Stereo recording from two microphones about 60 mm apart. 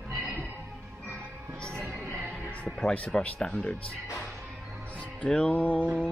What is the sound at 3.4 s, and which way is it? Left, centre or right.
Speech, centre.